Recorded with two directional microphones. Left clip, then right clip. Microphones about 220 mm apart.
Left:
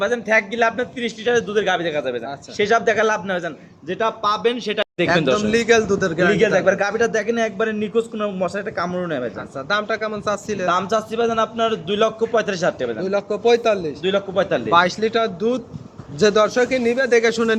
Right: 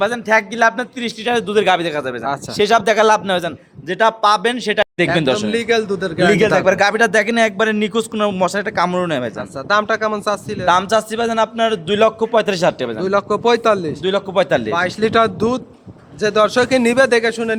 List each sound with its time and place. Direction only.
0.0 s a man's voice: 50° right (ahead or behind)
2.6 s a man's voice: 55° right (ahead or behind)
5.5 s a man's voice: centre (ahead or behind)
6.4 s a man's voice: 50° right (ahead or behind)
9.6 s speech: 25° right (ahead or behind)
10.7 s a man's voice: 45° right (ahead or behind)
13.0 s a man's voice: 35° right (ahead or behind)
14.0 s a man's voice: 55° right (ahead or behind)
14.9 s a man's voice: 35° right (ahead or behind)
16.2 s speech: 10° left (ahead or behind)
16.6 s a man's voice: 35° right (ahead or behind)
17.2 s speech: centre (ahead or behind)